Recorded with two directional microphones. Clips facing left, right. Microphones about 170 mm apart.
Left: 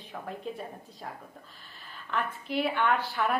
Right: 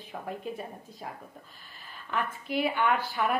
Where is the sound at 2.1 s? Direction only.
5° right (ahead or behind).